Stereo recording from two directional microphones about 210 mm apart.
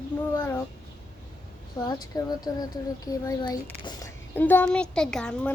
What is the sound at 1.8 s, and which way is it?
A child's voice, 15° left (ahead or behind).